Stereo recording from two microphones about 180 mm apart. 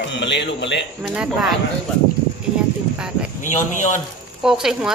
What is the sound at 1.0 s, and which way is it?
Speech, 5° right (ahead or behind).